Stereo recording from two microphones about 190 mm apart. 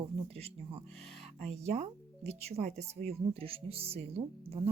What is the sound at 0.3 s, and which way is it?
Speech, 30° right (ahead or behind).